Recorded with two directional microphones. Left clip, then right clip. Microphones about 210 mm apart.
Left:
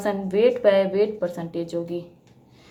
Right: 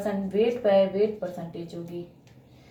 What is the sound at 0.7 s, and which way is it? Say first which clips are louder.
Speech: left 2 dB; 45° left (ahead or behind).